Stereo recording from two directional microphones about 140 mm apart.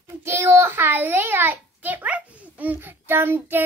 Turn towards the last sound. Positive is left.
turn(degrees=-15)  # may be behind; listen again after turning